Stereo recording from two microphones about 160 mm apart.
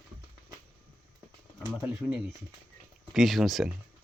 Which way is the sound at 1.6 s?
10° right (ahead or behind).